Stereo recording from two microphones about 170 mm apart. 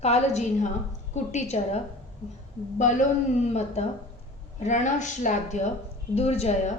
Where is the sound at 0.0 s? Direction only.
40° left (ahead or behind).